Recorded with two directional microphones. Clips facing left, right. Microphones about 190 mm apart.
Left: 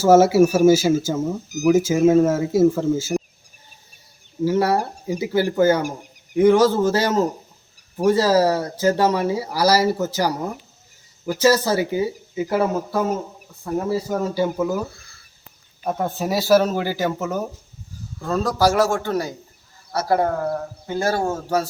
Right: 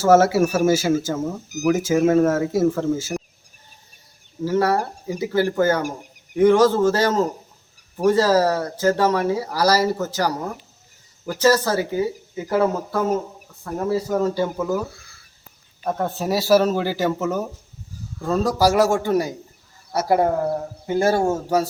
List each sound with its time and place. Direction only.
0.0 s speech: 5° left (ahead or behind)
4.4 s speech: 10° left (ahead or behind); by 21.2 s 25° right (ahead or behind)